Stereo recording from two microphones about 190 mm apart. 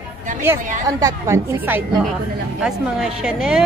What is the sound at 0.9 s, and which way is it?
A woman's voice, 15° right (ahead or behind).